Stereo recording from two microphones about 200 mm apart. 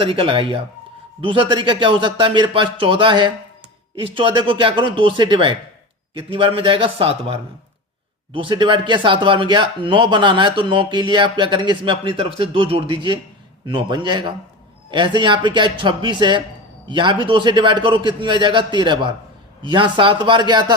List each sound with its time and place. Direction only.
0.0 s speech: 25° right (ahead or behind)